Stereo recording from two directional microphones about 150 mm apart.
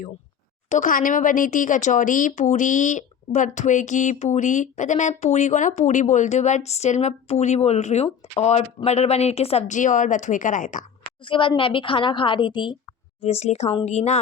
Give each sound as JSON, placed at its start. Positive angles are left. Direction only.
{"t": 0.7, "sound": "speech", "side_deg": 60}
{"t": 11.0, "sound": "a woman's voice", "side_deg": 35}
{"t": 13.2, "sound": "speech", "side_deg": 45}